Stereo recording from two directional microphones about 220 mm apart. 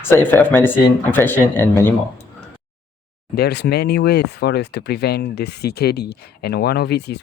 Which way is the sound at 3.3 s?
50° left (ahead or behind).